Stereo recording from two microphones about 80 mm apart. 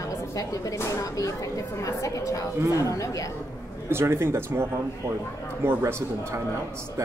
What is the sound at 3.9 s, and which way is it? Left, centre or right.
A man's voice, right.